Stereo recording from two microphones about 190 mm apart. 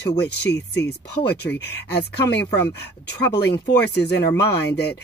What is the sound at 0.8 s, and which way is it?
Speech, 60° left (ahead or behind).